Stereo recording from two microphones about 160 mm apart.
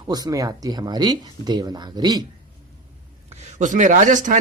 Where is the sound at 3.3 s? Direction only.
50° right (ahead or behind).